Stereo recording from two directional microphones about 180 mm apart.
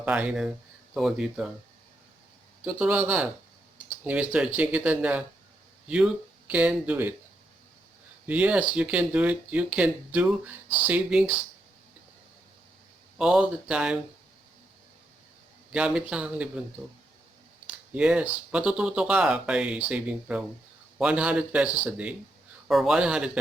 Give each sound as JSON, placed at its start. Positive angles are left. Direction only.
{"t": 0.0, "sound": "speech", "side_deg": -5}
{"t": 2.6, "sound": "speech", "side_deg": -10}
{"t": 6.5, "sound": "speech", "side_deg": -10}
{"t": 8.3, "sound": "speech", "side_deg": -10}
{"t": 13.1, "sound": "speech", "side_deg": -5}
{"t": 15.7, "sound": "speech", "side_deg": -5}
{"t": 17.7, "sound": "speech", "side_deg": -5}